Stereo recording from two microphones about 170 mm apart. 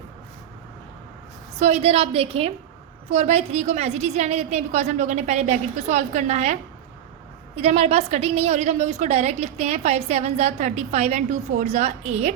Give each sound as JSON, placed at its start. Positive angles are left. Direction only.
{"t": 1.5, "sound": "a woman's voice", "side_deg": -40}